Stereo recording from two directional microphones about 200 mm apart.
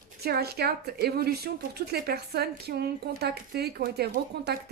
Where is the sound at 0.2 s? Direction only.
50° right (ahead or behind).